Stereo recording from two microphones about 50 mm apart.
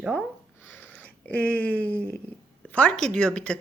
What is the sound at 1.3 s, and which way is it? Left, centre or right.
Speech, left.